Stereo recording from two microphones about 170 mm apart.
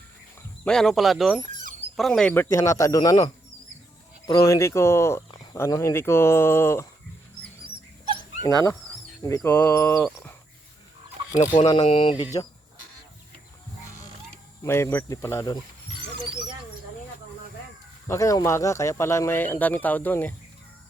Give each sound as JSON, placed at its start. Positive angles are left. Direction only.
{"t": 0.6, "sound": "speech", "side_deg": 5}
{"t": 7.6, "sound": "dog", "side_deg": -30}
{"t": 8.4, "sound": "speech", "side_deg": 20}
{"t": 11.5, "sound": "speech", "side_deg": 25}
{"t": 14.6, "sound": "speech", "side_deg": 15}
{"t": 18.1, "sound": "speech", "side_deg": 20}